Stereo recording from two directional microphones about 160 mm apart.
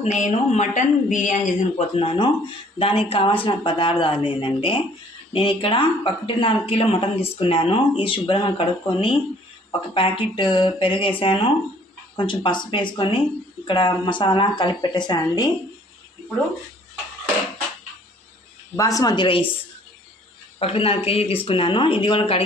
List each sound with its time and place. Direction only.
0.0 s a woman's voice: 40° left (ahead or behind); by 15.5 s 25° left (ahead or behind)
18.8 s speech: 20° left (ahead or behind)
20.5 s speech: 35° left (ahead or behind)